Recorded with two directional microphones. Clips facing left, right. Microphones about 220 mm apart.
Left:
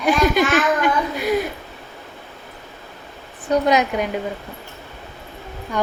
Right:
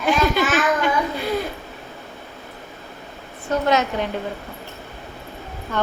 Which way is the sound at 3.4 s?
15° left (ahead or behind).